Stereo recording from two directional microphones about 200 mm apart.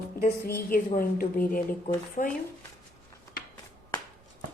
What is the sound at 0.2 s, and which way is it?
A woman's voice, 50° left (ahead or behind).